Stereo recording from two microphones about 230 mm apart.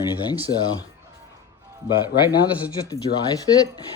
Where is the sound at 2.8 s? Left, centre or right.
Centre.